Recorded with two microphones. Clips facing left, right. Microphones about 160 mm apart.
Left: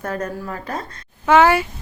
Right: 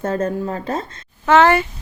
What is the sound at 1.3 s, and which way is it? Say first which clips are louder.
Speech: right 1 dB; 10° left (ahead or behind).